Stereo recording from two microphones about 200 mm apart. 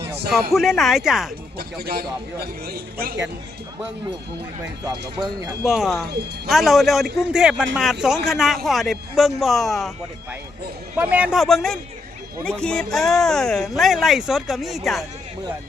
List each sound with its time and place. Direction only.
0.5 s speech: centre (ahead or behind)
1.8 s a man's voice: 50° right (ahead or behind)
4.9 s speech: 20° right (ahead or behind)
5.6 s speech: centre (ahead or behind)
6.1 s a man's voice: 55° right (ahead or behind)
6.5 s speech: centre (ahead or behind)
10.9 s speech: 5° right (ahead or behind)